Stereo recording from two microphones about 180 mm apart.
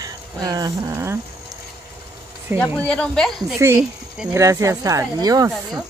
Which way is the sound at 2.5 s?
10° right (ahead or behind).